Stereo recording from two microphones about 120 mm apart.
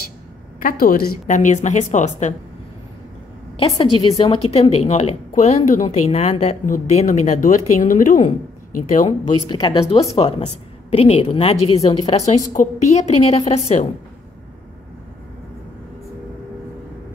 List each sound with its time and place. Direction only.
1.2 s a woman's voice: 90° left
3.7 s a woman's voice: 40° left (ahead or behind); by 9.1 s 90° left
9.5 s speech: 35° left (ahead or behind)
9.8 s a woman's voice: 55° left (ahead or behind)
10.1 s speech: 40° left (ahead or behind)
10.9 s a woman's voice: 60° left (ahead or behind)
12.1 s a woman's voice: 70° left (ahead or behind); by 13.4 s 55° left (ahead or behind)
13.5 s a woman's voice: 70° left (ahead or behind)